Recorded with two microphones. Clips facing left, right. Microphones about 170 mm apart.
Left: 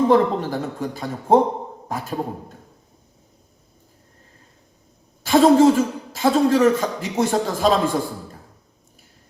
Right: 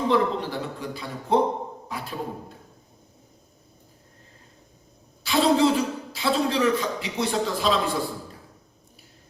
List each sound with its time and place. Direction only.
0.1 s a man's voice: 45° left (ahead or behind)
5.2 s a man's voice: 45° left (ahead or behind)